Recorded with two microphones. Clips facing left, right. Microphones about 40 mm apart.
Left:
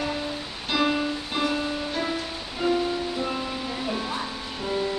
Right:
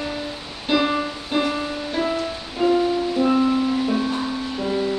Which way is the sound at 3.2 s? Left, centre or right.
Centre.